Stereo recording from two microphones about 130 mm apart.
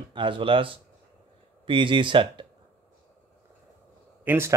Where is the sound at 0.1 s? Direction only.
40° right (ahead or behind).